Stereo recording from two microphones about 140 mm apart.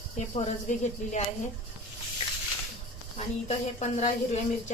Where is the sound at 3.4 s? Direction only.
55° left (ahead or behind).